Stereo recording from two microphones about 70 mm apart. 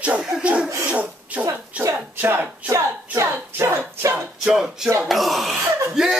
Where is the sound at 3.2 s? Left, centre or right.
Right.